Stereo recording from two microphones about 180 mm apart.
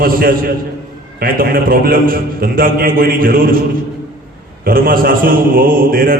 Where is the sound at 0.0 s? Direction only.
55° right (ahead or behind).